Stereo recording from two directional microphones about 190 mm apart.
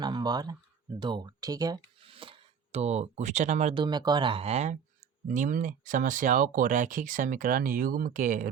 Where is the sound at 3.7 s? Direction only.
25° right (ahead or behind); by 8.5 s 45° right (ahead or behind).